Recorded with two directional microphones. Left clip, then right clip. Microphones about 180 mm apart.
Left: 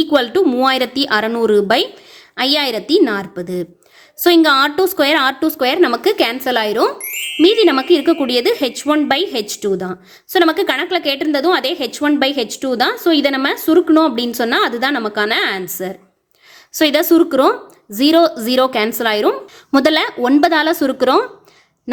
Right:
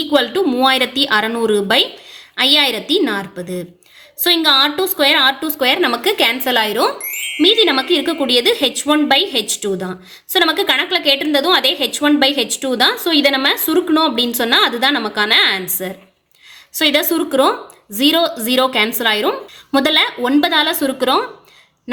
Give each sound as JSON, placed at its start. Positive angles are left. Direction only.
{"t": 0.0, "sound": "a woman's voice", "side_deg": 45}
{"t": 16.7, "sound": "speech", "side_deg": 45}